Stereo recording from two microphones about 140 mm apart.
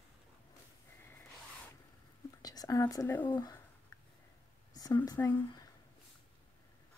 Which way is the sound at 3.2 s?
30° left (ahead or behind).